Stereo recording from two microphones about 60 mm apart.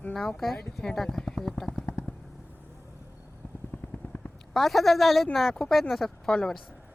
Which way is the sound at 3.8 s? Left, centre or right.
Left.